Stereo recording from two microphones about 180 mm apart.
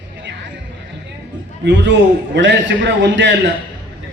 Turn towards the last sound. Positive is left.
turn(degrees=-85)